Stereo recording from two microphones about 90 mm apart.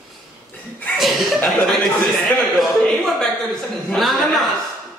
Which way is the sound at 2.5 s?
5° left (ahead or behind).